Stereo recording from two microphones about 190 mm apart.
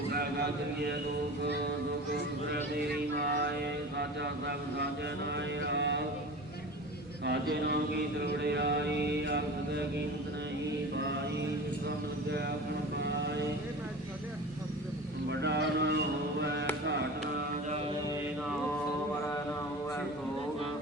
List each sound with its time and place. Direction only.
0.1 s mantra: 55° right (ahead or behind)
3.1 s music: 65° right (ahead or behind)
3.9 s mantra: 60° right (ahead or behind)
5.3 s vehicle: 65° right (ahead or behind)
7.3 s mantra: 60° right (ahead or behind)
13.0 s mantra: 65° right (ahead or behind)
15.3 s speech: 65° right (ahead or behind)